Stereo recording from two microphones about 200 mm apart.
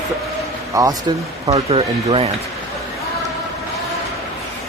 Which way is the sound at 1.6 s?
30° right (ahead or behind).